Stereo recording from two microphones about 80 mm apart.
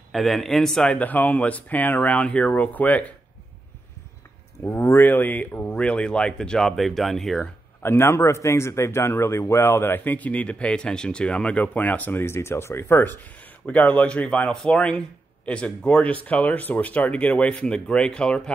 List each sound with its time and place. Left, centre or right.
0.1 s speech: centre
0.9 s speech: left
4.6 s speech: left; by 7.4 s centre
7.8 s speech: left; by 18.5 s centre